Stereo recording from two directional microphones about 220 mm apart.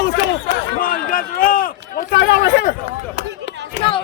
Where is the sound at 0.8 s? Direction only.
40° left (ahead or behind).